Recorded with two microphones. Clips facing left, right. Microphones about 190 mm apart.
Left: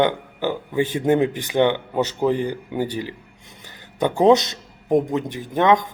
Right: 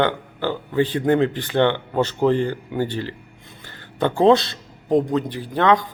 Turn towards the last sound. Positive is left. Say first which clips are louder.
# left 1 dB
turn(degrees=20)  # may be behind; listen again after turning